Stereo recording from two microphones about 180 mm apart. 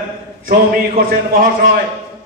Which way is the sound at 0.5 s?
50° right (ahead or behind).